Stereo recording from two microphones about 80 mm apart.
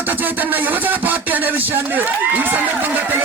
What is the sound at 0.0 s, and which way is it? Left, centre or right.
A man's voice, right.